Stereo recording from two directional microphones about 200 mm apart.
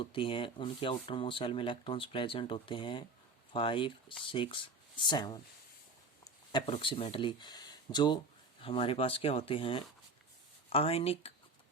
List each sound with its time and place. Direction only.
0.0 s speech: 25° left (ahead or behind)